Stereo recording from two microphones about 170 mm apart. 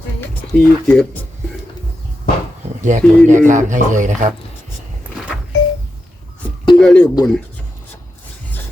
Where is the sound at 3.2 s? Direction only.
45° right (ahead or behind).